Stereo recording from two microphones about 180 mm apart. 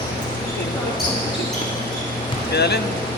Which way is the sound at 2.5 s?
65° left (ahead or behind).